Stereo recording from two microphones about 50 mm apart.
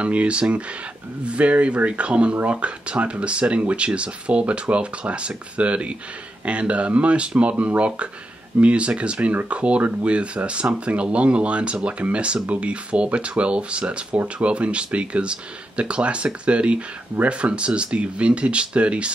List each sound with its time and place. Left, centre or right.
0.0 s speech: right